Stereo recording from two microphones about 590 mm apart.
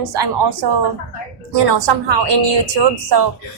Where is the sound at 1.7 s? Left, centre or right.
Right.